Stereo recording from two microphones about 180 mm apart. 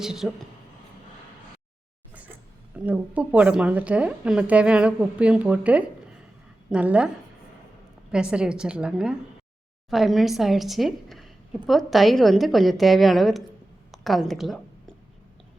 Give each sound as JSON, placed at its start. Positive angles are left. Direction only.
{"t": 0.0, "sound": "a woman's voice", "side_deg": 0}
{"t": 2.7, "sound": "a woman's voice", "side_deg": -5}
{"t": 8.1, "sound": "a woman's voice", "side_deg": -5}